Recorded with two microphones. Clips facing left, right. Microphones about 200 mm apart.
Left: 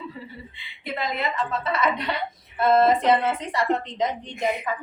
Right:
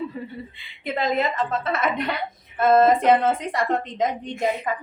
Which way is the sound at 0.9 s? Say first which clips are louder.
Right 5 dB; 45° right (ahead or behind).